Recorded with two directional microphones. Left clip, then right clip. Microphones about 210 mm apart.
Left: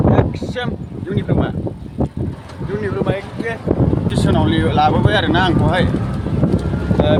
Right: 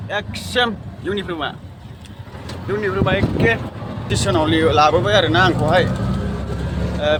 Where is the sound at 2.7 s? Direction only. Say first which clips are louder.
Right 2 dB; centre (ahead or behind).